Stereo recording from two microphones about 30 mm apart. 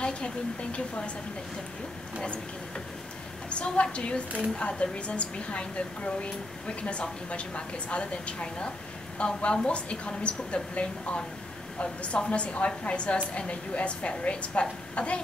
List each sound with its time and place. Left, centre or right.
0.0 s a woman's voice: left
3.4 s a woman's voice: left